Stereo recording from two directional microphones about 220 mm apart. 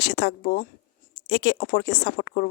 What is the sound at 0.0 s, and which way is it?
Speech, 50° left (ahead or behind).